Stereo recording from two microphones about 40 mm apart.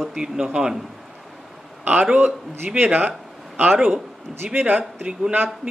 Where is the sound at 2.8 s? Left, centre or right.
Right.